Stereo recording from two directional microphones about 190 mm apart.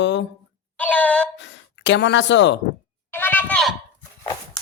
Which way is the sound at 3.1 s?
10° left (ahead or behind).